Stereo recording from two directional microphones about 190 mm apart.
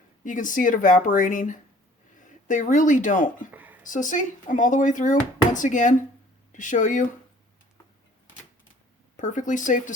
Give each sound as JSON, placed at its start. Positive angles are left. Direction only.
{"t": 0.3, "sound": "speech", "side_deg": 45}
{"t": 3.5, "sound": "speech", "side_deg": -10}
{"t": 3.8, "sound": "speech", "side_deg": 45}
{"t": 9.1, "sound": "speech", "side_deg": 40}